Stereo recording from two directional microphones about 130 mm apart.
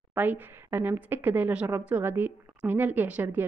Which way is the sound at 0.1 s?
15° right (ahead or behind).